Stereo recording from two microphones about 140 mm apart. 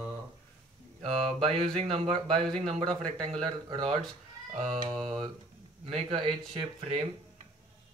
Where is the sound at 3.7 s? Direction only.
40° right (ahead or behind).